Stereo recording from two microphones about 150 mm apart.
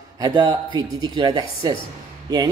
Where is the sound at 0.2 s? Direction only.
30° right (ahead or behind).